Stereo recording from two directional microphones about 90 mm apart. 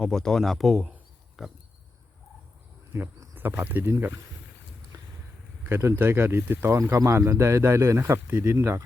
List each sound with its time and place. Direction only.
0.0 s speech: 5° left (ahead or behind)
1.4 s pig: 5° right (ahead or behind)
2.9 s speech: 25° right (ahead or behind)
5.6 s speech: 30° right (ahead or behind)